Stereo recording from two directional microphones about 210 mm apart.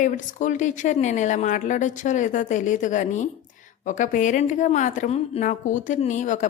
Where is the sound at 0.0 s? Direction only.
35° left (ahead or behind).